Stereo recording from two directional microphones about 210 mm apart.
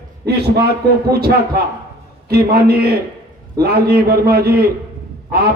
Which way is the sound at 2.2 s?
45° right (ahead or behind).